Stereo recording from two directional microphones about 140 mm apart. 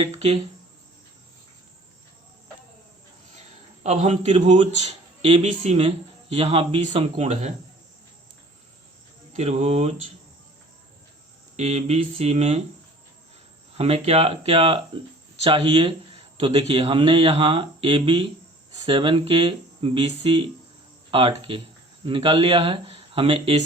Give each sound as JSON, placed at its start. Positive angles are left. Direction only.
{"t": 0.0, "sound": "a man's voice", "side_deg": -45}
{"t": 3.8, "sound": "a man's voice", "side_deg": -55}
{"t": 9.3, "sound": "a man's voice", "side_deg": -50}
{"t": 11.5, "sound": "a man's voice", "side_deg": -50}
{"t": 13.7, "sound": "a man's voice", "side_deg": -50}